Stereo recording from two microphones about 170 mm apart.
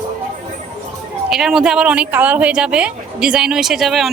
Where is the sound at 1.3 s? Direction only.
5° right (ahead or behind).